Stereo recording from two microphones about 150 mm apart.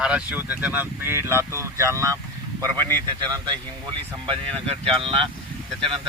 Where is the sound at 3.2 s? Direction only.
30° right (ahead or behind).